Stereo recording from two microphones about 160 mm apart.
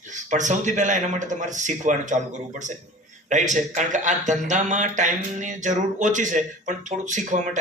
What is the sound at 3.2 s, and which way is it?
Speech, 50° right (ahead or behind).